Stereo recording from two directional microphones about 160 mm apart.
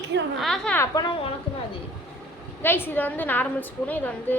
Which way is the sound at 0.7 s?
20° left (ahead or behind).